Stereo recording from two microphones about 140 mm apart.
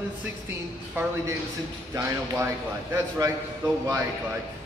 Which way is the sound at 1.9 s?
20° right (ahead or behind).